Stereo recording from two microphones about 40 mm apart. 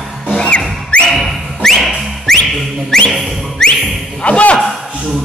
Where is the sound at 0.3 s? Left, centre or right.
Left.